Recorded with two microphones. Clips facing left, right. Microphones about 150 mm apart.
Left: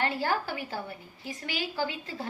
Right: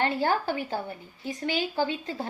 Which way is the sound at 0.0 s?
25° right (ahead or behind).